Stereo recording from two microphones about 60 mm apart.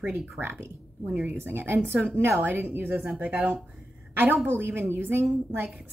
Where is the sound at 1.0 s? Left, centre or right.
Right.